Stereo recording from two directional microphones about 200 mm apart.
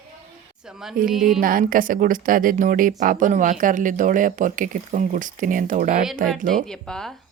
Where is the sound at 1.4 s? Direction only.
45° right (ahead or behind).